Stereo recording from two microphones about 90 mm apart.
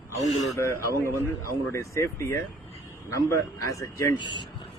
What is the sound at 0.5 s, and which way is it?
A man's voice, 30° left (ahead or behind).